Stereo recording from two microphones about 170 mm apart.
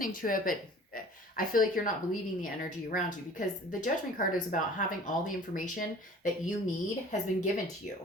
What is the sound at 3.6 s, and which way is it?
A woman's voice, 50° left (ahead or behind).